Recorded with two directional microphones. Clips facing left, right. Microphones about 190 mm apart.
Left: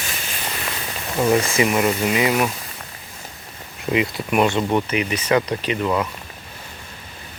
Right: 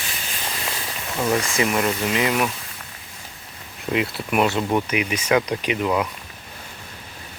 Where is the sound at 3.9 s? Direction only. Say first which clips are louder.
Left 2 dB; centre (ahead or behind).